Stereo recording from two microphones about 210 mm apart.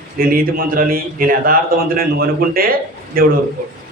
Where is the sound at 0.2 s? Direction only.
45° right (ahead or behind).